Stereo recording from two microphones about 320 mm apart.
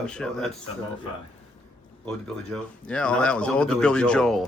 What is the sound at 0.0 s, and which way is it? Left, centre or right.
Speech, centre.